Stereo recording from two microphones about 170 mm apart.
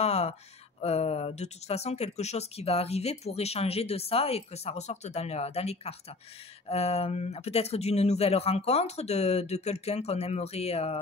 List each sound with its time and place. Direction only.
0.0 s speech: 40° left (ahead or behind)